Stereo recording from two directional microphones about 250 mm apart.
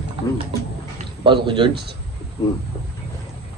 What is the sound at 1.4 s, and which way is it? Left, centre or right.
Speech, centre.